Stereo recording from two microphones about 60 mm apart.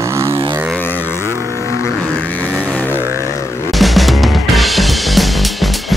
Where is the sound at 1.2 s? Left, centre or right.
Right.